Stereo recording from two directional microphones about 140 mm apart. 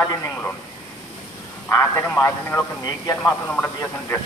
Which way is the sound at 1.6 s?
20° left (ahead or behind).